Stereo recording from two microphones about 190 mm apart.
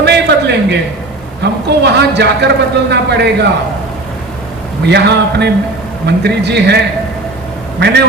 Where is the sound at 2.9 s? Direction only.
60° right (ahead or behind).